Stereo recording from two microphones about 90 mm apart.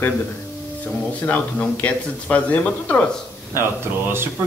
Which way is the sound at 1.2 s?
20° left (ahead or behind).